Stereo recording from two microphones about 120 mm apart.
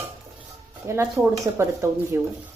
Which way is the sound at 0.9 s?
25° right (ahead or behind).